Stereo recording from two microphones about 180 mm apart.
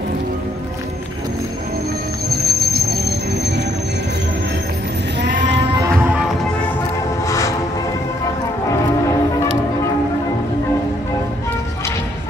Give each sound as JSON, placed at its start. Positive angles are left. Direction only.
{"t": 2.2, "sound": "music", "side_deg": -60}
{"t": 7.2, "sound": "train", "side_deg": 20}